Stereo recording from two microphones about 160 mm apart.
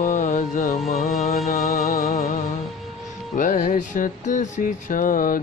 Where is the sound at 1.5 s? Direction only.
45° left (ahead or behind).